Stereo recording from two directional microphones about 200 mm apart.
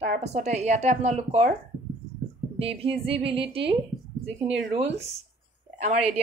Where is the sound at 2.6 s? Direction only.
30° right (ahead or behind).